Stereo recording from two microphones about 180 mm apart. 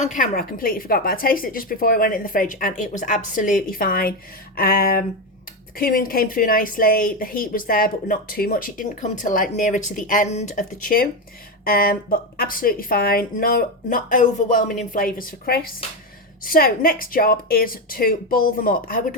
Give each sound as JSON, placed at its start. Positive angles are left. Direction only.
{"t": 0.0, "sound": "speech", "side_deg": 45}